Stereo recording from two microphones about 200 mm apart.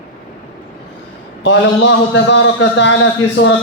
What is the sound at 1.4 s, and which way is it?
A man's voice, 65° left (ahead or behind).